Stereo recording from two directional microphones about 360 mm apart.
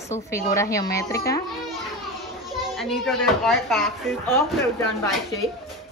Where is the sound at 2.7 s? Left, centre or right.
Centre.